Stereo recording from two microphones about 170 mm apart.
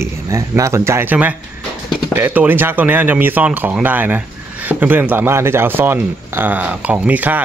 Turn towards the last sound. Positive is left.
turn(degrees=-10)  # may be behind; listen again after turning